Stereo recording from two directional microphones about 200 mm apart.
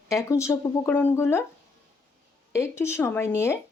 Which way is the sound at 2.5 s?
15° left (ahead or behind).